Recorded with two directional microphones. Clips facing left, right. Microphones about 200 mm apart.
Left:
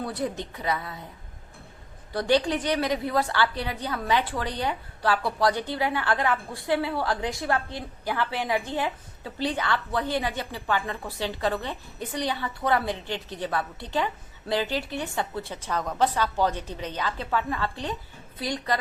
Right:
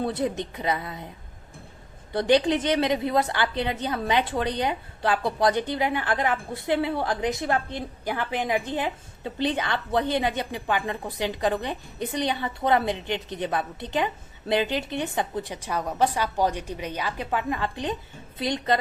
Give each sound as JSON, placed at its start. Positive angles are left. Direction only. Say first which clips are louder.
{"t": 0.0, "sound": "a woman's voice", "louder": "right 4 dB", "side_deg": -25}
{"t": 2.1, "sound": "a woman's voice", "louder": "right 3 dB", "side_deg": -20}